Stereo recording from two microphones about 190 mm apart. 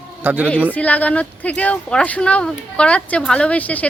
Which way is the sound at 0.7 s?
10° left (ahead or behind).